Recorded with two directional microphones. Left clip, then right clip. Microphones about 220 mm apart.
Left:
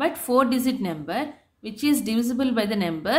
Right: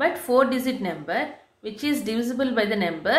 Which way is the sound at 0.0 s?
35° left (ahead or behind).